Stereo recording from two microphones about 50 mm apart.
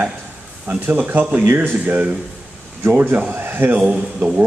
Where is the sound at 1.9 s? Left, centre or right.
Right.